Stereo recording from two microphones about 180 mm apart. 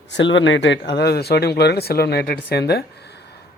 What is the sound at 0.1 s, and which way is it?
Speech, 90° left.